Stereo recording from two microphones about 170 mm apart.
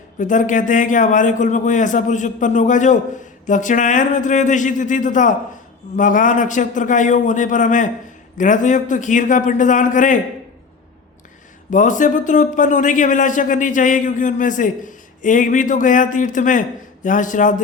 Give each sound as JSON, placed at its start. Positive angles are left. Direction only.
{"t": 0.2, "sound": "a man's voice", "side_deg": 50}
{"t": 11.7, "sound": "a man's voice", "side_deg": 50}